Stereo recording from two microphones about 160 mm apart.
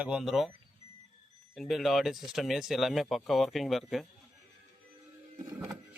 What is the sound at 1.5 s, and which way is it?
Speech, centre (ahead or behind).